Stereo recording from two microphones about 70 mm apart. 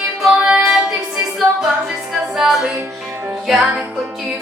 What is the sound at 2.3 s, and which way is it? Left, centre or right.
Music, centre.